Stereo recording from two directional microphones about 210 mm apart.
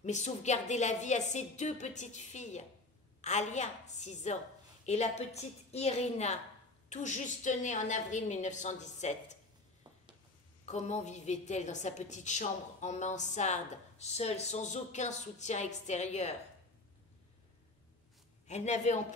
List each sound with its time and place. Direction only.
0.0 s a woman's voice: 35° left (ahead or behind)
10.6 s a woman's voice: 30° left (ahead or behind)
18.5 s a woman's voice: 35° left (ahead or behind)